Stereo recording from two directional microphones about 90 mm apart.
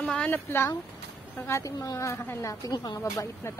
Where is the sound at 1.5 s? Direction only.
40° left (ahead or behind).